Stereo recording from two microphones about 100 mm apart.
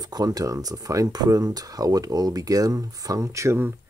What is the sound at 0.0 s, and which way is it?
Speech, 40° right (ahead or behind).